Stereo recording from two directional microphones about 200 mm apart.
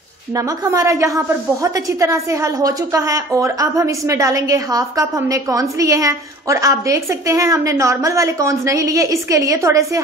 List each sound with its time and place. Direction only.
0.4 s a woman's voice: 15° right (ahead or behind)